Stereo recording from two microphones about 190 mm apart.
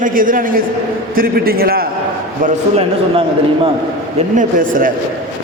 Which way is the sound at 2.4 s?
35° right (ahead or behind).